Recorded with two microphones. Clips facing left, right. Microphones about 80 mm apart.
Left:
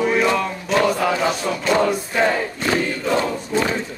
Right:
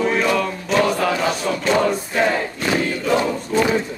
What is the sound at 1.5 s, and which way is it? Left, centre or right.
Battle cry, centre.